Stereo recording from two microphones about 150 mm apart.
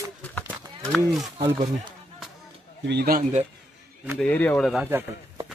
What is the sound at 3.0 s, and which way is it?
Speech, 80° right.